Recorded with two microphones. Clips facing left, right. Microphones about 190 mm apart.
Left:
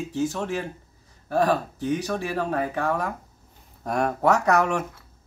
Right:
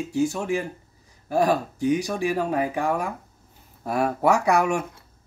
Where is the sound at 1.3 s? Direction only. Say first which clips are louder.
Right 1 dB; 10° right (ahead or behind).